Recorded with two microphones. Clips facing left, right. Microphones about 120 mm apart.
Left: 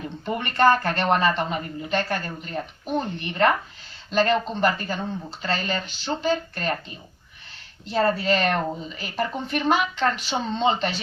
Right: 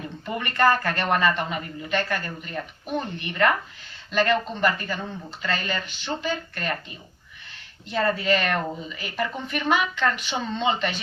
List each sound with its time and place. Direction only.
0.3 s a woman's voice: 25° left (ahead or behind)
7.9 s a woman's voice: 30° left (ahead or behind)